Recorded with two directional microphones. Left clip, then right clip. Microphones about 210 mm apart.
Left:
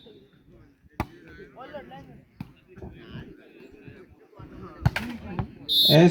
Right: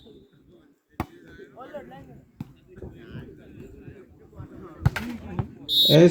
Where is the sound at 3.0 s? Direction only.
15° right (ahead or behind).